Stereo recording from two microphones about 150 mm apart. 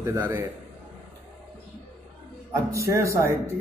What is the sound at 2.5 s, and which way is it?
Speech, 20° right (ahead or behind).